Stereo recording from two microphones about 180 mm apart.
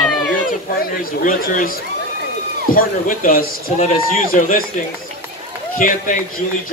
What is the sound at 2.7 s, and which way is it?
Speech, 50° left (ahead or behind).